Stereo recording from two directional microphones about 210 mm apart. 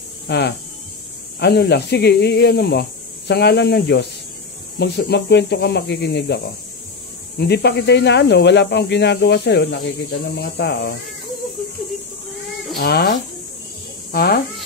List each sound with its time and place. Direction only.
0.3 s speech: 55° left (ahead or behind)
12.7 s speech: 50° left (ahead or behind)